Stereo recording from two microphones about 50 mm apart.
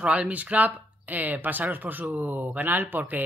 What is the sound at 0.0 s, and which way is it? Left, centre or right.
Speech, right.